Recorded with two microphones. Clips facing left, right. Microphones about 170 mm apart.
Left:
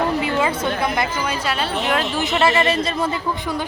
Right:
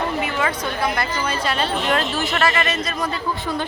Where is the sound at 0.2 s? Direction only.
25° left (ahead or behind).